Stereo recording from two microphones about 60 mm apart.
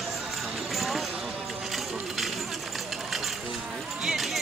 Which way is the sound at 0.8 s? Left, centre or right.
Centre.